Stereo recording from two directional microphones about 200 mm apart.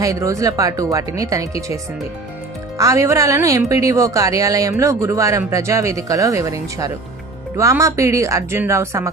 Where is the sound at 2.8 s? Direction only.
15° right (ahead or behind).